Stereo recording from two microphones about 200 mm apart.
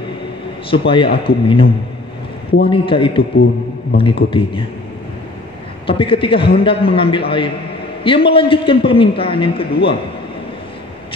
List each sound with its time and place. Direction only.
0.7 s a man's voice: 25° left (ahead or behind)
2.7 s a man's voice: 25° left (ahead or behind)
5.9 s a man's voice: 25° left (ahead or behind)